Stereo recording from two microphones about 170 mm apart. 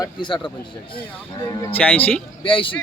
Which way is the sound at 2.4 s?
30° left (ahead or behind).